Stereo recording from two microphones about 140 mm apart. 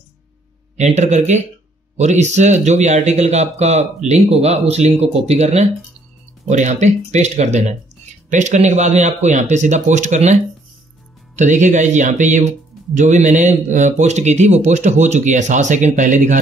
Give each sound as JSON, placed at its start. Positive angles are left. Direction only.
{"t": 0.7, "sound": "speech", "side_deg": -55}